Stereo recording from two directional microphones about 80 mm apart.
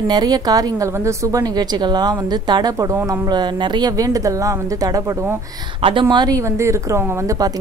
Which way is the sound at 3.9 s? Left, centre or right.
Right.